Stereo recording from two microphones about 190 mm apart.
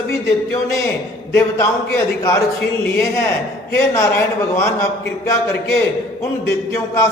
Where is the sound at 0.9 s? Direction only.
15° left (ahead or behind).